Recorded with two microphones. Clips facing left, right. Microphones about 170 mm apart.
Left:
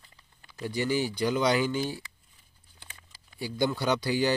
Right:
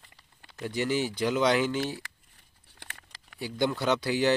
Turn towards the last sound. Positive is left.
turn(degrees=0)  # may be behind; listen again after turning